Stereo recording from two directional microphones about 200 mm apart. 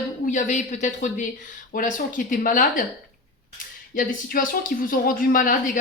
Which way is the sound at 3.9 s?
45° left (ahead or behind).